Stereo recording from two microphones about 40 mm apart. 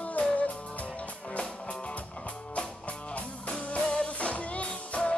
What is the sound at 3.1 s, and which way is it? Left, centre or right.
Music, left.